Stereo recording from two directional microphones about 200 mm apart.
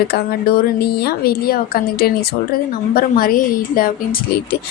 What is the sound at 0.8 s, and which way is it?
A woman's voice, 50° left (ahead or behind).